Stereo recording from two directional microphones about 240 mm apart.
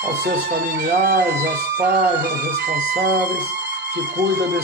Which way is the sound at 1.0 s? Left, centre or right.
Right.